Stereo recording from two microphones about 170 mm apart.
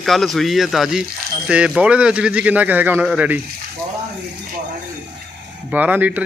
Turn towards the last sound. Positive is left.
turn(degrees=-10)  # may be behind; listen again after turning